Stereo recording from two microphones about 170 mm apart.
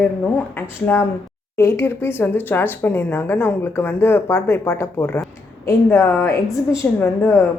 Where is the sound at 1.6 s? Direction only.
15° left (ahead or behind).